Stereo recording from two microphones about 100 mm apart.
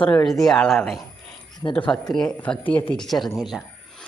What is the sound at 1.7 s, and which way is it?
Speech, 15° left (ahead or behind).